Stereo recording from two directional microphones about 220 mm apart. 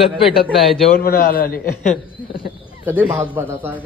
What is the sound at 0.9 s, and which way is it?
Speech, 45° left (ahead or behind).